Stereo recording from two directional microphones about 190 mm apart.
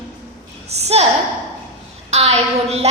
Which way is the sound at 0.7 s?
35° right (ahead or behind).